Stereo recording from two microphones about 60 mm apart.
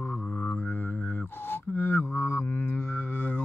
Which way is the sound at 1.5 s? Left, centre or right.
Left.